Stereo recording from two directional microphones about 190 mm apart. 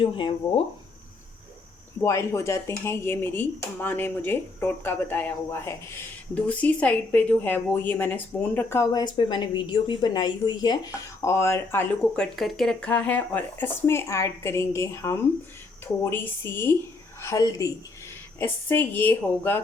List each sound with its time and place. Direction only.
0.0 s speech: 25° left (ahead or behind)
2.0 s speech: 15° left (ahead or behind)